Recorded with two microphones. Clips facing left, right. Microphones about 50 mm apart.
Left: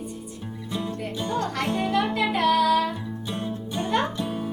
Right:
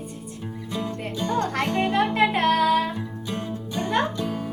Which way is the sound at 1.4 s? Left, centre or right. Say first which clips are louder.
Right 2 dB; right.